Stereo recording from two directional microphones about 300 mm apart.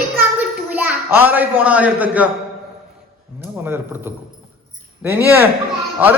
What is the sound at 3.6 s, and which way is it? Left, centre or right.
A man's voice, centre.